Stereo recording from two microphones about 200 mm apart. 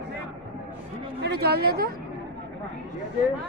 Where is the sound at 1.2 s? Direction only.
55° right (ahead or behind).